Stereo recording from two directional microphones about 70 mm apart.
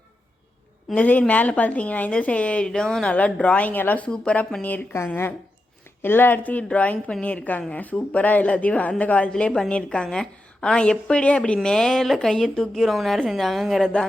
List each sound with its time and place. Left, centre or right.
0.9 s a woman's voice: left
3.1 s a woman's voice: centre